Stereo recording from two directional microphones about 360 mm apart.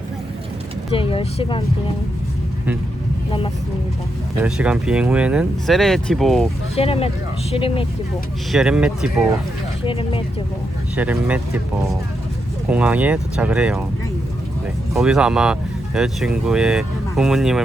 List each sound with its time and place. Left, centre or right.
0.9 s speech: centre
4.4 s speech: centre
6.7 s speech: centre
8.5 s speech: centre
9.8 s speech: centre
10.9 s speech: centre
14.9 s speech: centre